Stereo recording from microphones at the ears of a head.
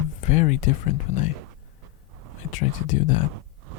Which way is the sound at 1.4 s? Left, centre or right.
Right.